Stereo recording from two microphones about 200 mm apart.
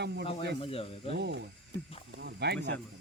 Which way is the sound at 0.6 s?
25° left (ahead or behind).